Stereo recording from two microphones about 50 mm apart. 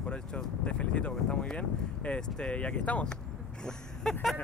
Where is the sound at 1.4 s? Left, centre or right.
Left.